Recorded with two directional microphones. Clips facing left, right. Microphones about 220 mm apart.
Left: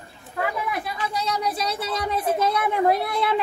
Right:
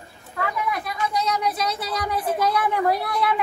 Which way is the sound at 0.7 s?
25° left (ahead or behind).